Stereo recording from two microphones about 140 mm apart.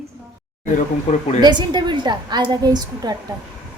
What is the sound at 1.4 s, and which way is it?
A woman's voice, 30° right (ahead or behind).